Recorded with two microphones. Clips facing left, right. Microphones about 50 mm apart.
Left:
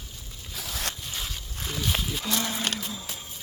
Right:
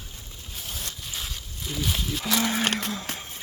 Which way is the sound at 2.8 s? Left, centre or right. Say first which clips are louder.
Right 5 dB; right.